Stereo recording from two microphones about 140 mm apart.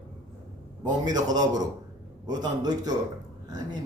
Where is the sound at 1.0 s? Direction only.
30° right (ahead or behind).